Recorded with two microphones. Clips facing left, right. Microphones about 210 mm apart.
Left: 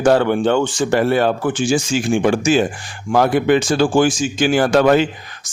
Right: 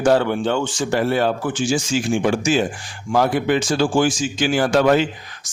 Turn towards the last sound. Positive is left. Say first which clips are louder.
# left 3 dB
turn(degrees=55)  # may be behind; listen again after turning